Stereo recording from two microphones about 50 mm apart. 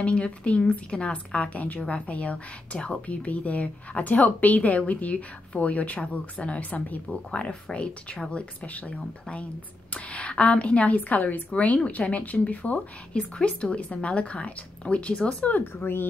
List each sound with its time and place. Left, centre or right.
0.0 s speech: left
7.1 s speech: centre
9.9 s speech: left
15.5 s speech: left